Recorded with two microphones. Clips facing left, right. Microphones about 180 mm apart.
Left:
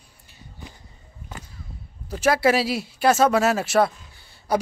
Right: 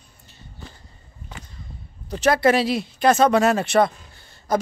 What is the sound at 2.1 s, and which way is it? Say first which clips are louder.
Speech: right 2 dB; 5° left (ahead or behind).